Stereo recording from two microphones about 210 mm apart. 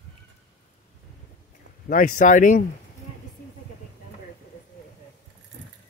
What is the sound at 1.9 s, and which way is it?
Speech, 40° left (ahead or behind).